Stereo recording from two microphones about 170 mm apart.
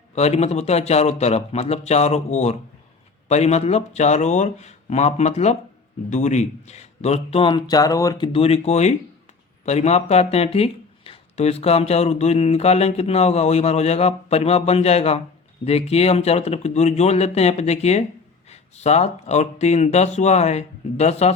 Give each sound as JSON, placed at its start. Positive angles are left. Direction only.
{"t": 0.1, "sound": "speech", "side_deg": 40}
{"t": 8.3, "sound": "speech", "side_deg": 35}